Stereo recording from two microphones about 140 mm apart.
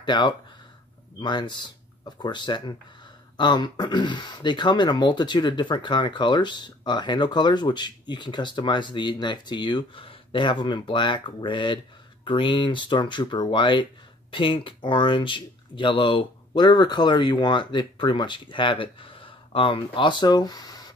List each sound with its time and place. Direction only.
0.0 s speech: 35° left (ahead or behind)